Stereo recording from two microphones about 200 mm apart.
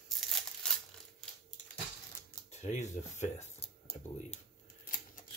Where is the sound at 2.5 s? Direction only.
35° left (ahead or behind).